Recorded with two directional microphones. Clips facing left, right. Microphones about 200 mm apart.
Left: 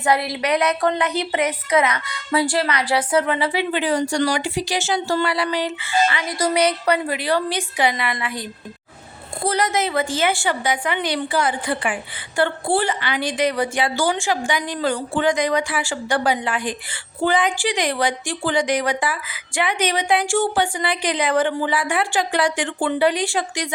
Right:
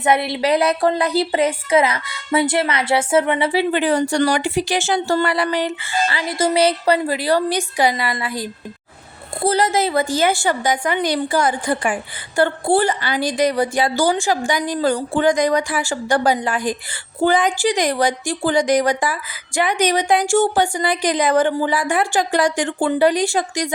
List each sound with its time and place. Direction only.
0.0 s a woman's voice: 25° right (ahead or behind)
3.7 s a woman's voice: 55° right (ahead or behind)
6.1 s a woman's voice: 30° right (ahead or behind)
9.5 s a woman's voice: 30° right (ahead or behind)